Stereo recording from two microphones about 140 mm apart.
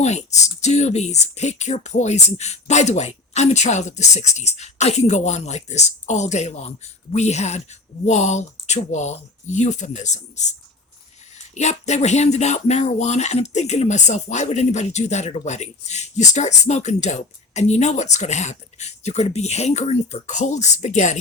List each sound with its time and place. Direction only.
0.0 s speech: 55° left (ahead or behind)
11.5 s speech: 55° left (ahead or behind)